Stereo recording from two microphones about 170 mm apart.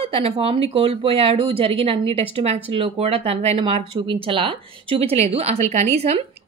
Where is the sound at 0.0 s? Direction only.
35° right (ahead or behind).